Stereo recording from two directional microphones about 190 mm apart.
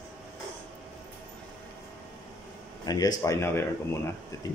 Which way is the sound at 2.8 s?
20° left (ahead or behind).